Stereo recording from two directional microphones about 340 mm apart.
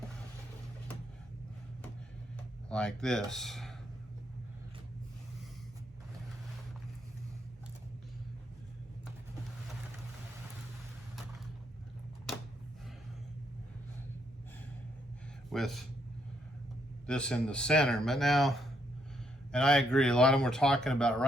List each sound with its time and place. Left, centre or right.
2.6 s speech: centre
15.5 s a man's voice: centre
17.1 s speech: centre